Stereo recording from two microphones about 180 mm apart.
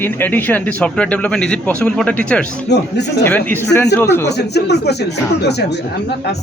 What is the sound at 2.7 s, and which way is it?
Speech, 70° left (ahead or behind).